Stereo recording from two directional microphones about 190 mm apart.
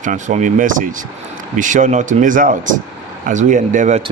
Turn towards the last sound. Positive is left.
turn(degrees=-40)  # may be behind; listen again after turning